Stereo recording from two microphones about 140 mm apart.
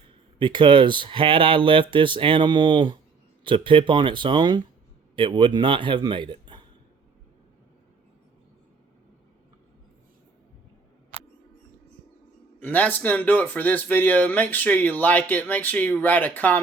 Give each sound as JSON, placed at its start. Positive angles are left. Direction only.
{"t": 0.3, "sound": "speech", "side_deg": -35}
{"t": 12.5, "sound": "speech", "side_deg": 15}